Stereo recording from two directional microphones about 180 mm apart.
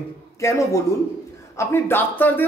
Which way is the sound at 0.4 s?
15° left (ahead or behind).